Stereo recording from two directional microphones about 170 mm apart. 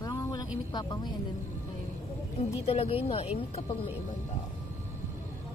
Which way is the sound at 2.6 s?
35° left (ahead or behind).